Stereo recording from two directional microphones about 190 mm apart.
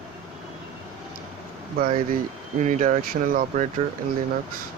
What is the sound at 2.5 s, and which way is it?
Speech, 40° right (ahead or behind).